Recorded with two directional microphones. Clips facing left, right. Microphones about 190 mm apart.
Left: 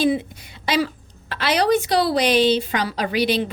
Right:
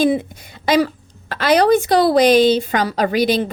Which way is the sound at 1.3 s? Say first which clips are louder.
Right 5 dB; 45° right (ahead or behind).